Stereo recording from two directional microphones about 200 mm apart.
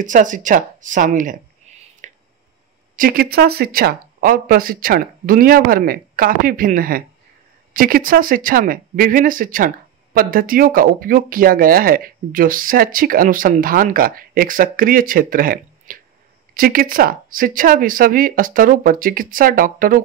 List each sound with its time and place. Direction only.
0.0 s speech: 40° right (ahead or behind)
1.7 s whispering: 35° right (ahead or behind)
2.0 s a sound: 35° right (ahead or behind)
3.0 s speech: 50° right (ahead or behind)